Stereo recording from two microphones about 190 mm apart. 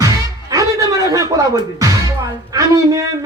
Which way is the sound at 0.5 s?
20° right (ahead or behind).